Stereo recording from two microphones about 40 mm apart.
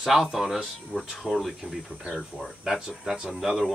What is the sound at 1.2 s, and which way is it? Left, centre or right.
Speech, right.